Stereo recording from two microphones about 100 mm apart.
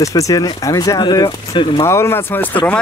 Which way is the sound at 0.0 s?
35° left (ahead or behind).